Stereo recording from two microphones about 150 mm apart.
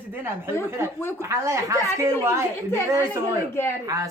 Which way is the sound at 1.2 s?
20° right (ahead or behind).